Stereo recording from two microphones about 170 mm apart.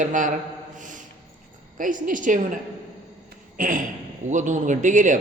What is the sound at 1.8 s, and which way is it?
Speech, 50° right (ahead or behind).